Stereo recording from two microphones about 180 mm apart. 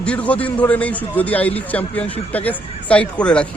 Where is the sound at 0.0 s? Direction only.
5° left (ahead or behind).